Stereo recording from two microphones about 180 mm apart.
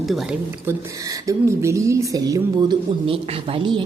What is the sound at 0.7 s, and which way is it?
A woman's voice, 20° right (ahead or behind).